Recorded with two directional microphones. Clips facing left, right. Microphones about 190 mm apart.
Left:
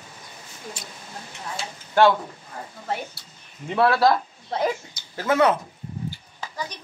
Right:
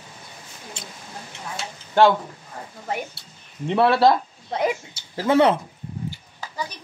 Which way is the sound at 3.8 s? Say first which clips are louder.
Right 2 dB; 25° right (ahead or behind).